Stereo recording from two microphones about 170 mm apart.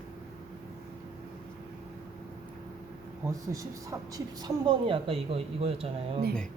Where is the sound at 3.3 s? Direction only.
20° right (ahead or behind).